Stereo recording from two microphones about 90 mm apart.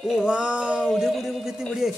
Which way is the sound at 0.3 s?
10° right (ahead or behind).